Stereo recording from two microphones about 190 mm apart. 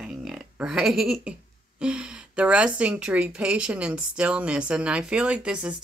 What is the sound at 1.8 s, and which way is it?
A woman's voice, 5° right (ahead or behind).